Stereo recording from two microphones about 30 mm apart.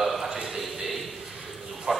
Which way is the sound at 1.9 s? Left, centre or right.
Centre.